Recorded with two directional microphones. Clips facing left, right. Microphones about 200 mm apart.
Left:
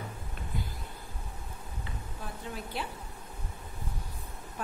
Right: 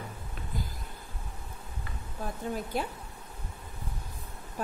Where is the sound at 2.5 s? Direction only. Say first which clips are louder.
Right 5 dB; 45° right (ahead or behind).